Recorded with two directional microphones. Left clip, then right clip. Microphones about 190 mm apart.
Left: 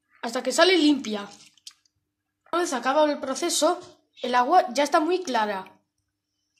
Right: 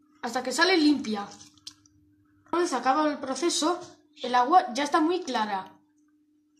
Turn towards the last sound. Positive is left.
turn(degrees=50)  # may be behind; listen again after turning